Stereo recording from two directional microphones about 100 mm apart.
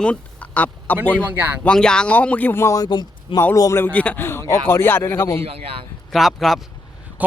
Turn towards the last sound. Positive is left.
turn(degrees=0)  # may be behind; listen again after turning